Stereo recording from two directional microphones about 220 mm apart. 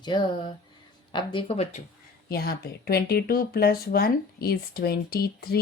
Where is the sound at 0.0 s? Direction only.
20° left (ahead or behind).